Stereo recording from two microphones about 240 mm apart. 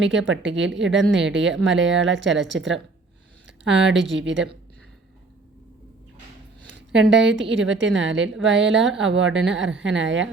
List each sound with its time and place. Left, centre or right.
0.0 s a woman's voice: right
6.7 s a woman's voice: right